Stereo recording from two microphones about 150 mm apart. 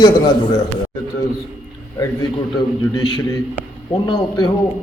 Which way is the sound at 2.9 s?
20° left (ahead or behind).